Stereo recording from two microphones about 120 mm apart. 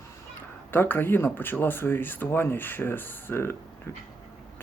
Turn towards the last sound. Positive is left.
turn(degrees=20)  # may be behind; listen again after turning